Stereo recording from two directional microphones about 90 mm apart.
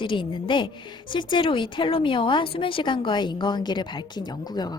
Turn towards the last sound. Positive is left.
turn(degrees=50)  # may be behind; listen again after turning